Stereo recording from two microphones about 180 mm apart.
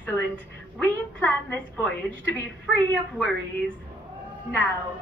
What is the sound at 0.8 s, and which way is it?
A woman's voice, 10° left (ahead or behind).